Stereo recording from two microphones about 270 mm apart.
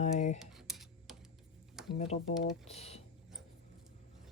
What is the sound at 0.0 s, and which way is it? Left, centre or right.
Cutlery, left.